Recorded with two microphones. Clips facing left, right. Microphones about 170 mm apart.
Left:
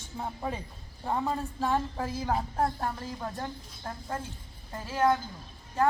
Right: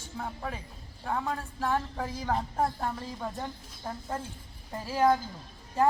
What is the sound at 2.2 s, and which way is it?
A woman's voice, 5° left (ahead or behind).